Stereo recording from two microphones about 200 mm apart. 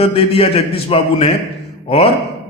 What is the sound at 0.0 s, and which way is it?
A man's voice, 30° left (ahead or behind).